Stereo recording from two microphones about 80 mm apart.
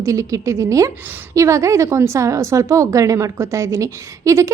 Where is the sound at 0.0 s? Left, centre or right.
Right.